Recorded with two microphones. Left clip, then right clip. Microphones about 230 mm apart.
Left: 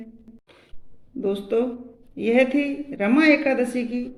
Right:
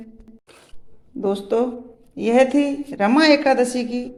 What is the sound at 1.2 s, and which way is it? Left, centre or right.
A woman's voice, centre.